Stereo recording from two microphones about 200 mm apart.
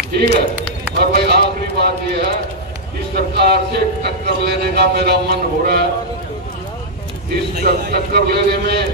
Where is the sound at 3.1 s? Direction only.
55° right (ahead or behind).